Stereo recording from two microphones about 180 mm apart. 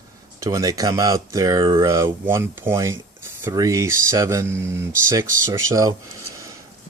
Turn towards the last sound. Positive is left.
turn(degrees=-15)  # may be behind; listen again after turning